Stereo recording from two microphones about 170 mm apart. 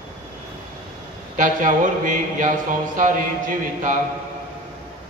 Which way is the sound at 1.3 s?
50° right (ahead or behind).